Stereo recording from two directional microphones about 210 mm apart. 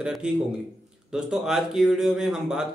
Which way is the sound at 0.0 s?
5° right (ahead or behind).